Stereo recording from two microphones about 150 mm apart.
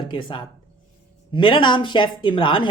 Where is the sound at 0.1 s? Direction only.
35° left (ahead or behind).